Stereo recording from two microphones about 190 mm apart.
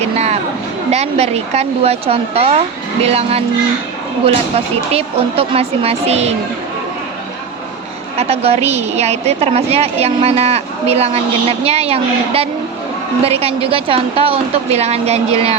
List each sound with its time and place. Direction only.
0.0 s a sound: 35° right (ahead or behind)
0.9 s a woman's voice: 35° right (ahead or behind)
4.9 s a woman's voice: 30° right (ahead or behind)
8.1 s a woman's voice: 35° right (ahead or behind)